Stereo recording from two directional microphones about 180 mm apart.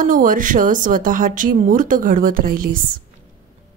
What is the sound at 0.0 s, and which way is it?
Speech, 50° right (ahead or behind).